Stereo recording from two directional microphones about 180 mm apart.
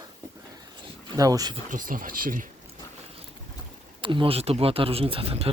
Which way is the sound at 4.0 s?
30° right (ahead or behind).